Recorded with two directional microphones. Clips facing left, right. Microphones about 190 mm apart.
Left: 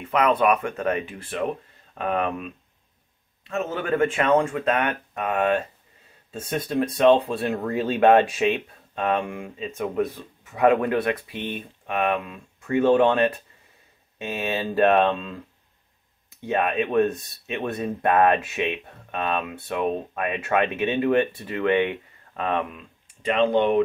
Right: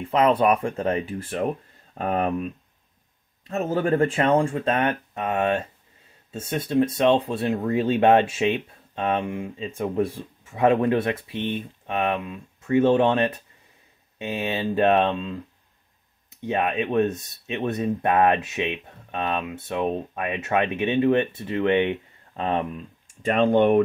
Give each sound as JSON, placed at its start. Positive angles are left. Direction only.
{"t": 0.0, "sound": "speech", "side_deg": -30}
{"t": 3.4, "sound": "speech", "side_deg": -40}
{"t": 23.0, "sound": "speech", "side_deg": -50}